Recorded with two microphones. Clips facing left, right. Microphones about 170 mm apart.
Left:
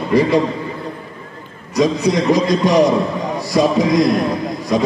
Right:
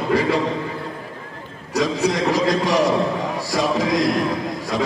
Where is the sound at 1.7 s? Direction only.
20° left (ahead or behind).